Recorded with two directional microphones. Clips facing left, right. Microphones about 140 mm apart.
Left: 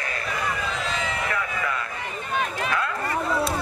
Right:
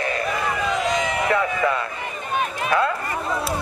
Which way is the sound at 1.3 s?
30° right (ahead or behind).